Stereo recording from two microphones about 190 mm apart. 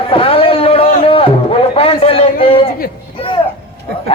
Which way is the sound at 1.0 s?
30° left (ahead or behind).